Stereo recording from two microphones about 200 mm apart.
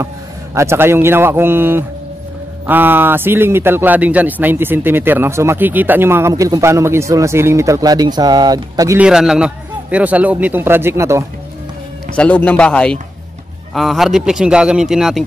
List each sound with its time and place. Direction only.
0.6 s speech: 10° right (ahead or behind)
9.0 s speech: 5° right (ahead or behind)
12.2 s a man's voice: 5° left (ahead or behind)